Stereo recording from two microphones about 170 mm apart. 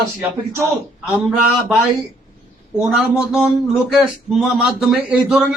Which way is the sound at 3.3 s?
5° right (ahead or behind).